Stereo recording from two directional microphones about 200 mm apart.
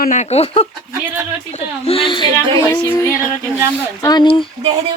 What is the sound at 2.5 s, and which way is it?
Speech, 10° left (ahead or behind).